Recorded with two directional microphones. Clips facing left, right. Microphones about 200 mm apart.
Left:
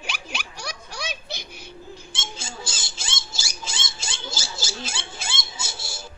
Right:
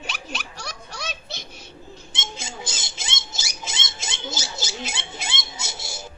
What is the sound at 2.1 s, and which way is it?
Rodents, 20° right (ahead or behind).